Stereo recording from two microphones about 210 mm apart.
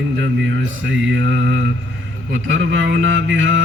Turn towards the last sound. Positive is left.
turn(degrees=-65)  # may be behind; listen again after turning